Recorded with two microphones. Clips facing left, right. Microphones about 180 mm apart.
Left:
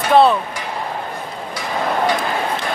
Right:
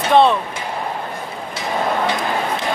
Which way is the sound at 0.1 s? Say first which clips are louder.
Left 1 dB; 5° left (ahead or behind).